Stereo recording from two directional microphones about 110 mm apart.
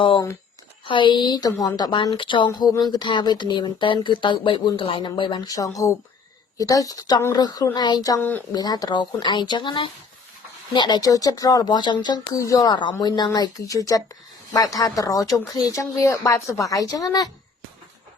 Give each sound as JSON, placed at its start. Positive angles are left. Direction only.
{"t": 0.9, "sound": "a woman's voice", "side_deg": 45}
{"t": 8.2, "sound": "speech", "side_deg": 15}
{"t": 8.5, "sound": "a woman's voice", "side_deg": 35}